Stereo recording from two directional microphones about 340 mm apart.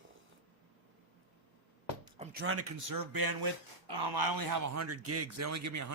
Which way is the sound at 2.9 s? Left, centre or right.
Right.